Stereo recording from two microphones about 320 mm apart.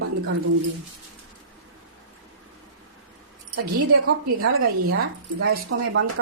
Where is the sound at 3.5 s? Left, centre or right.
Right.